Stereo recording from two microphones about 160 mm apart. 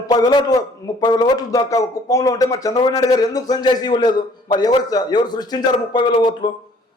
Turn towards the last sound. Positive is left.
turn(degrees=30)  # may be behind; listen again after turning